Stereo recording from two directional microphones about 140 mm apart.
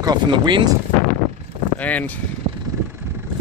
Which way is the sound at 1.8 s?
10° left (ahead or behind).